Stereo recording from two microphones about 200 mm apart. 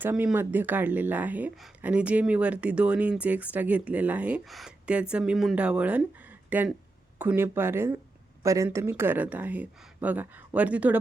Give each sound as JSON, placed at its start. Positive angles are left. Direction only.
{"t": 0.0, "sound": "speech", "side_deg": -10}